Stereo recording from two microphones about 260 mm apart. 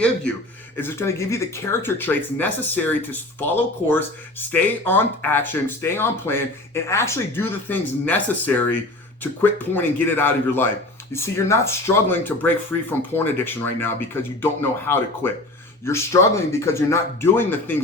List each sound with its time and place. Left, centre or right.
0.8 s speech: centre